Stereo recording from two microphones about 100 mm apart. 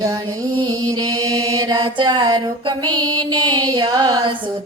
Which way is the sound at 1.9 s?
50° right (ahead or behind).